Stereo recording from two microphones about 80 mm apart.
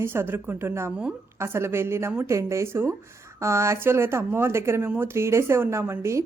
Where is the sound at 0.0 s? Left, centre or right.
Right.